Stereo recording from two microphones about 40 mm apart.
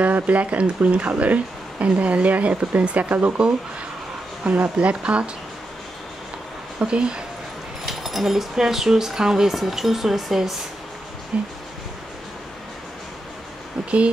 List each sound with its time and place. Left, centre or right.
0.0 s speech: right
6.8 s speech: right
7.8 s speech: centre
11.3 s speech: right